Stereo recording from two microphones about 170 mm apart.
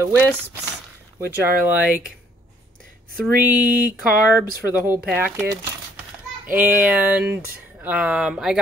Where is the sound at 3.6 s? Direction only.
55° right (ahead or behind).